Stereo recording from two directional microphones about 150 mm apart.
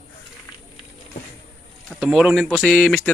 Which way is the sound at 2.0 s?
5° right (ahead or behind).